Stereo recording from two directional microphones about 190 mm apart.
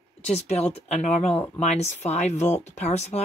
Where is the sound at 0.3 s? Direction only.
35° left (ahead or behind).